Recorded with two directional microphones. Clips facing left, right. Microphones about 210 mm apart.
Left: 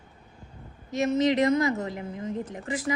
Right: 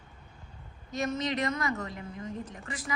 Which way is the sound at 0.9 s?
25° left (ahead or behind).